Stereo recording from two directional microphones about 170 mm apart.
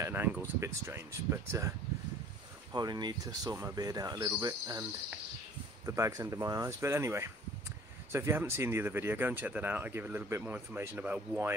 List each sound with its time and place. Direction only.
0.0 s speech: 10° right (ahead or behind)
2.7 s speech: 25° right (ahead or behind)
5.9 s speech: 20° right (ahead or behind)